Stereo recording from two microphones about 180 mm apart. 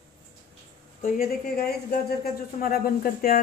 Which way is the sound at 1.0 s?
50° left (ahead or behind).